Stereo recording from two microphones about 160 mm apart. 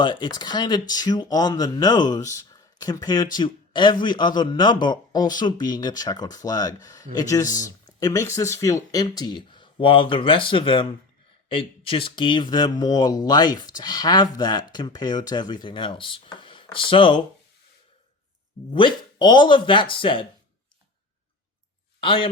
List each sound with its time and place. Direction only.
0.0 s speech: 30° left (ahead or behind)
18.7 s speech: 30° left (ahead or behind)
22.0 s speech: 35° left (ahead or behind)